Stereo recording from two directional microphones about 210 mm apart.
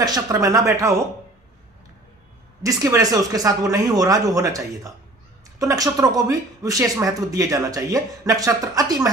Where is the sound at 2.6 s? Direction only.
15° right (ahead or behind).